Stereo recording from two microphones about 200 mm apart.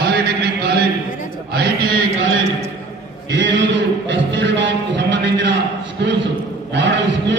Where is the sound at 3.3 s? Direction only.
65° right (ahead or behind).